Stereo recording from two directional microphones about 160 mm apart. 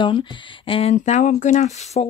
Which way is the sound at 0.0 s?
30° left (ahead or behind).